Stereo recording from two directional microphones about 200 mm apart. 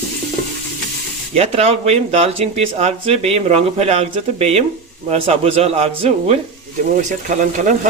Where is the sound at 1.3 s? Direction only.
30° right (ahead or behind).